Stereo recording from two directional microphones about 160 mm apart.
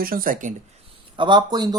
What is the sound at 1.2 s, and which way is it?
Speech, 30° right (ahead or behind).